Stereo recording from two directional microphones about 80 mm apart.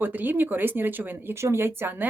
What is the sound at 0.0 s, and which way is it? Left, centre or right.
Speech, right.